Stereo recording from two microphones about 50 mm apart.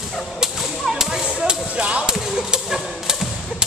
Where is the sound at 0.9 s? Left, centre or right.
Centre.